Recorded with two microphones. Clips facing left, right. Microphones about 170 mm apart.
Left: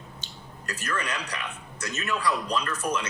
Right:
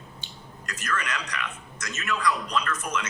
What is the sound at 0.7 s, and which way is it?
A man's voice, 30° left (ahead or behind).